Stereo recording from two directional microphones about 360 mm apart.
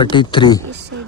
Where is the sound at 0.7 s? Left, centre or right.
Right.